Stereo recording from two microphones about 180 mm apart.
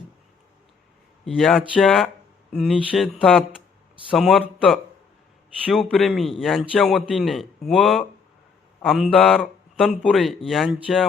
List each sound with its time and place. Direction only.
1.2 s a man's voice: centre (ahead or behind)